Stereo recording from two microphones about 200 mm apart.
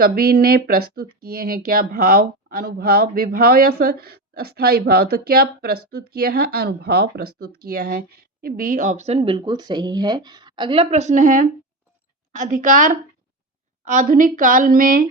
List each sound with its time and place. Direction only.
0.0 s a woman's voice: 50° right (ahead or behind)